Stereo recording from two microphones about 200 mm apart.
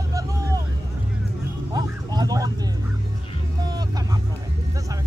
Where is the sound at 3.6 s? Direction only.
20° right (ahead or behind).